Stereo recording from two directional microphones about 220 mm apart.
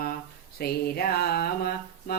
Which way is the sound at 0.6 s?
45° left (ahead or behind).